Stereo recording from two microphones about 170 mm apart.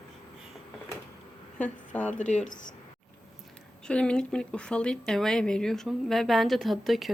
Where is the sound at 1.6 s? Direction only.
10° left (ahead or behind).